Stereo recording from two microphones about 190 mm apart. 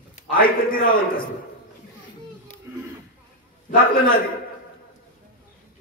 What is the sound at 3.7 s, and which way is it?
Speech, 50° left (ahead or behind).